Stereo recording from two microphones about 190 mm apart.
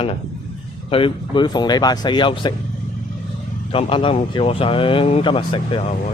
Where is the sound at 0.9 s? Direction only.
30° left (ahead or behind).